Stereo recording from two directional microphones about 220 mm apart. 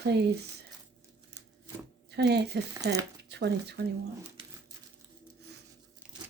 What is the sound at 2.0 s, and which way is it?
Speech, 50° right (ahead or behind).